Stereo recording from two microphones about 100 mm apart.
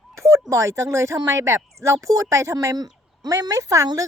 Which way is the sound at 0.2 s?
30° right (ahead or behind).